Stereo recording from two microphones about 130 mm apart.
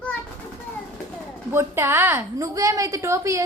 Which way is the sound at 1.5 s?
20° right (ahead or behind).